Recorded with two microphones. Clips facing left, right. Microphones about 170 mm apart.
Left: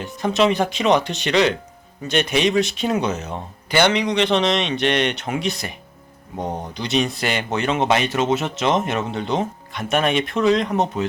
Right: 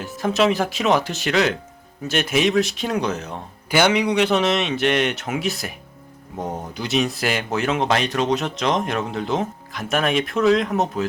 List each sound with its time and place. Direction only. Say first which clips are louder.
0.0 s speech: left 1 dB; centre (ahead or behind)